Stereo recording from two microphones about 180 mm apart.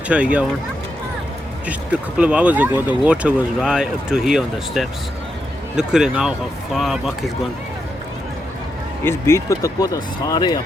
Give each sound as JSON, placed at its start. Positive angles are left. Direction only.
{"t": 0.1, "sound": "speech", "side_deg": -5}
{"t": 2.1, "sound": "speech", "side_deg": -5}
{"t": 9.0, "sound": "speech", "side_deg": 15}